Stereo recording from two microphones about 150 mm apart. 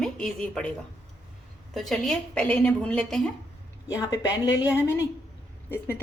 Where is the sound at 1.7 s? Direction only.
Centre (ahead or behind).